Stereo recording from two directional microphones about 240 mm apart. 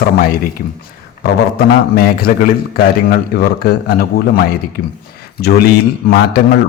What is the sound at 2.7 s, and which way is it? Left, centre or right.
A man's voice, left.